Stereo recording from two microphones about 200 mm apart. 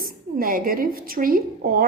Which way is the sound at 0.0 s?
45° right (ahead or behind).